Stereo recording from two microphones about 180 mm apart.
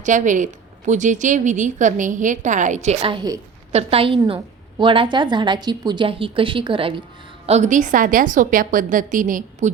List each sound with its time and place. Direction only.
0.0 s a woman's voice: 45° right (ahead or behind); by 3.4 s 20° right (ahead or behind)
3.7 s a woman's voice: 35° right (ahead or behind)
7.4 s a woman's voice: 40° right (ahead or behind)